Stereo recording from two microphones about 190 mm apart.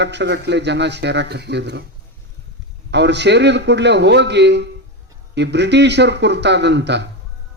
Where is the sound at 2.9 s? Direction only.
65° right (ahead or behind).